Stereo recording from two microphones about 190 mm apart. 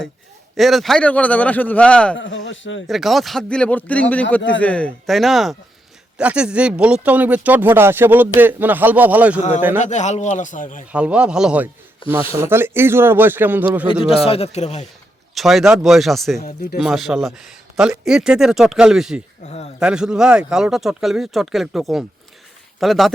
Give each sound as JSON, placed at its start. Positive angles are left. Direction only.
{"t": 0.5, "sound": "speech", "side_deg": 0}
{"t": 2.1, "sound": "speech", "side_deg": 85}
{"t": 2.8, "sound": "speech", "side_deg": 0}
{"t": 9.8, "sound": "a man's voice", "side_deg": 40}
{"t": 10.9, "sound": "speech", "side_deg": -5}
{"t": 14.3, "sound": "a man's voice", "side_deg": 30}
{"t": 15.4, "sound": "speech", "side_deg": 0}
{"t": 16.4, "sound": "speech", "side_deg": 50}
{"t": 16.7, "sound": "speech", "side_deg": 0}